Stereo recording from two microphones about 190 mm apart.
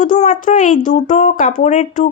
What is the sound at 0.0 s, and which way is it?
A child's voice, 45° left (ahead or behind).